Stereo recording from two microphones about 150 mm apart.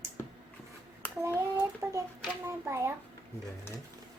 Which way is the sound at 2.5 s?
20° right (ahead or behind).